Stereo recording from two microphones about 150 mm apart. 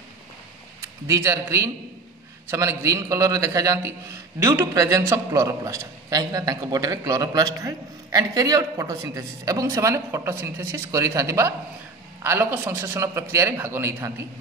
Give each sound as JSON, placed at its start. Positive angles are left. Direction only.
{"t": 0.7, "sound": "a man's voice", "side_deg": -20}